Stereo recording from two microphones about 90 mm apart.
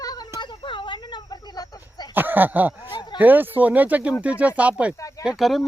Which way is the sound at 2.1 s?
20° right (ahead or behind).